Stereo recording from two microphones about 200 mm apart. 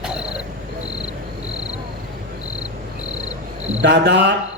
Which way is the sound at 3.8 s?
60° right (ahead or behind).